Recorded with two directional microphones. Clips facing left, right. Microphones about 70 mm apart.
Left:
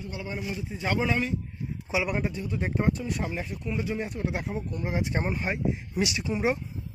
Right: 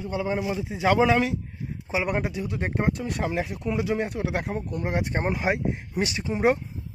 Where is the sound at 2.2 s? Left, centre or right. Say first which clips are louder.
Right 1 dB; right.